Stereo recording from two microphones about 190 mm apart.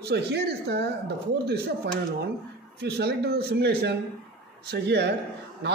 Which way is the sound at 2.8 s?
60° right (ahead or behind).